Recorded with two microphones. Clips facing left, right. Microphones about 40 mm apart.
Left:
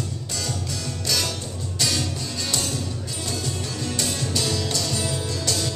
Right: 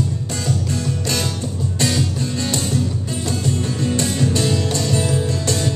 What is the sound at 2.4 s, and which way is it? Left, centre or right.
Music, right.